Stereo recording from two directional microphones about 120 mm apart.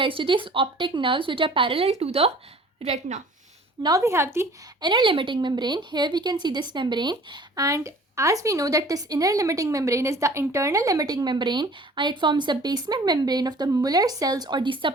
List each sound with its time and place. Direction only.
0.0 s a woman's voice: 45° right (ahead or behind); by 3.2 s 65° right (ahead or behind)
3.8 s a woman's voice: 25° right (ahead or behind)
4.8 s a woman's voice: 40° right (ahead or behind)